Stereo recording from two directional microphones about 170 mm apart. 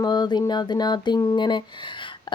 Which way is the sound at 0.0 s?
25° left (ahead or behind).